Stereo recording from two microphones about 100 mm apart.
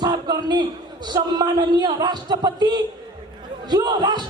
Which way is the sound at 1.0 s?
45° right (ahead or behind).